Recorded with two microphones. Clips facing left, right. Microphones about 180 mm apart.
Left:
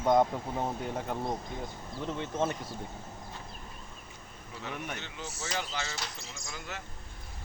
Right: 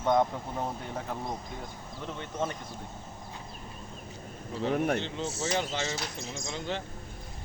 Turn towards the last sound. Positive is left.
turn(degrees=-30)  # may be behind; listen again after turning